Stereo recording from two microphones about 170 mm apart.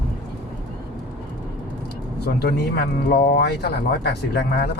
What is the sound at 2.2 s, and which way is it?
Speech, 70° left (ahead or behind).